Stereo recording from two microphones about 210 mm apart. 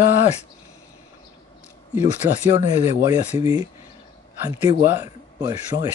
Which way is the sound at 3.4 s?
15° right (ahead or behind).